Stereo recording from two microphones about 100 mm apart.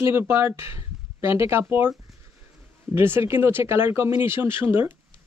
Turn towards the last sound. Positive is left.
turn(degrees=-20)  # may be behind; listen again after turning